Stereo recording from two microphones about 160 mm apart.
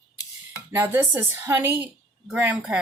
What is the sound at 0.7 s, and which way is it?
A woman's voice, 15° right (ahead or behind).